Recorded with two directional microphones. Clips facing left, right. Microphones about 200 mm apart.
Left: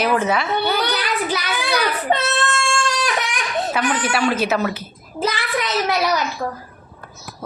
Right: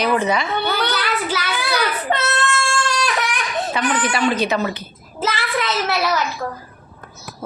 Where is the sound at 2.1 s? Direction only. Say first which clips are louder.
Left 3 dB; 15° left (ahead or behind).